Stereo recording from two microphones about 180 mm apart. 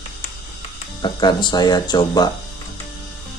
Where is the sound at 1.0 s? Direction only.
25° left (ahead or behind).